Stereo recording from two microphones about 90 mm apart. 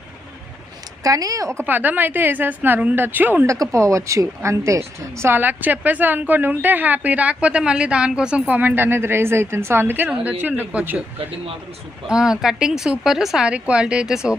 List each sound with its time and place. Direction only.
1.0 s speech: 40° right (ahead or behind)
1.6 s speech: 20° right (ahead or behind)
3.4 s speech: 35° right (ahead or behind); by 11.0 s 15° right (ahead or behind)
12.0 s speech: 5° right (ahead or behind)